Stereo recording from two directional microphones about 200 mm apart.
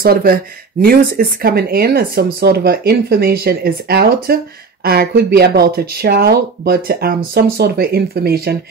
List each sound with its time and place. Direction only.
0.0 s speech: 50° right (ahead or behind)